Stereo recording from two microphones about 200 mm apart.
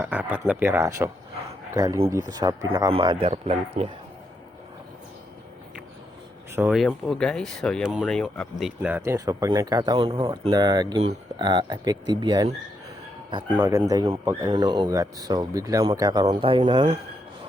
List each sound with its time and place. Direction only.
0.0 s speech: 10° right (ahead or behind); by 3.8 s 30° right (ahead or behind)
6.6 s speech: 5° right (ahead or behind); by 12.5 s 25° right (ahead or behind)
13.6 s speech: 15° right (ahead or behind); by 17.0 s 30° right (ahead or behind)